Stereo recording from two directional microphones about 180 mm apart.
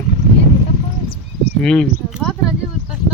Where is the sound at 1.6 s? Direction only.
5° left (ahead or behind).